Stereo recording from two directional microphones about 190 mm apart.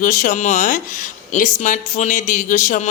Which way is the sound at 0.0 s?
45° left (ahead or behind).